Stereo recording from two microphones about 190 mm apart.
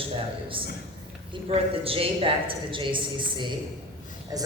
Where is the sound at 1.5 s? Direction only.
30° right (ahead or behind).